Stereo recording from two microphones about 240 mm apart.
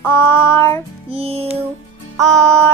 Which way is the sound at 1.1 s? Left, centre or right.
Right.